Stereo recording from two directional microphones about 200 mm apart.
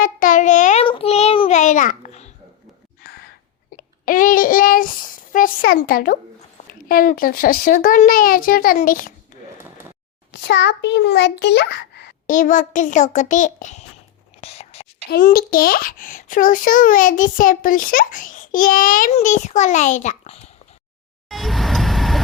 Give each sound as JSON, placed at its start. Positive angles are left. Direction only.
{"t": 0.0, "sound": "child singing", "side_deg": 40}
{"t": 3.8, "sound": "a child's voice", "side_deg": 45}
{"t": 10.3, "sound": "a child's voice", "side_deg": 60}
{"t": 12.3, "sound": "a child's voice", "side_deg": 40}
{"t": 14.4, "sound": "whispering", "side_deg": 30}
{"t": 15.1, "sound": "a child's voice", "side_deg": 50}
{"t": 21.2, "sound": "vehicle", "side_deg": 0}